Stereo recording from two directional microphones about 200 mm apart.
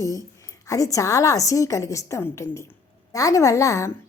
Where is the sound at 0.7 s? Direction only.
15° left (ahead or behind).